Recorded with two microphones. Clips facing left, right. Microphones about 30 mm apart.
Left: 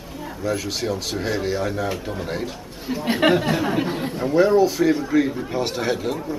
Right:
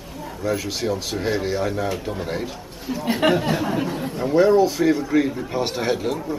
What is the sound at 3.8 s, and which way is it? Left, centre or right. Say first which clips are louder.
Speech: left 1 dB; left.